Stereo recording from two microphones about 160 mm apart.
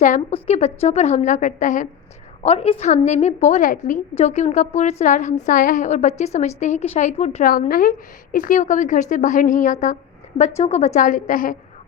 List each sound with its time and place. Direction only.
0.0 s a woman's voice: 55° left (ahead or behind)
0.4 s a woman's voice: 40° left (ahead or behind)
2.4 s a woman's voice: 40° left (ahead or behind)
7.7 s a woman's voice: 60° left (ahead or behind)